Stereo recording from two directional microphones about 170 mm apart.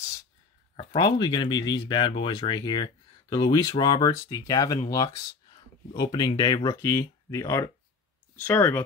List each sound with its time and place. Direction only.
0.7 s speech: 25° left (ahead or behind)